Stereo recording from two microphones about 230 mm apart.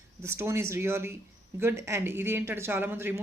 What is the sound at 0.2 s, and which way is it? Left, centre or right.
Speech, centre.